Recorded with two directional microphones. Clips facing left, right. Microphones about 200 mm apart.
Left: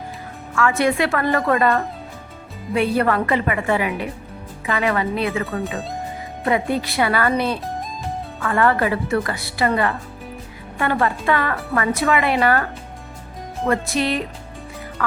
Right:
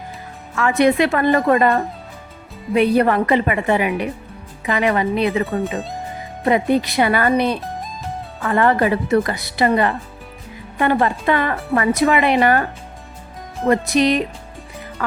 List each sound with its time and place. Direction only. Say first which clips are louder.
0.5 s speech: right 3 dB; 20° right (ahead or behind)
13.7 s speech: right 5 dB; 20° right (ahead or behind)